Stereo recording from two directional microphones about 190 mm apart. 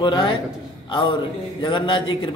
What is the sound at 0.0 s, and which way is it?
Speech, 25° left (ahead or behind).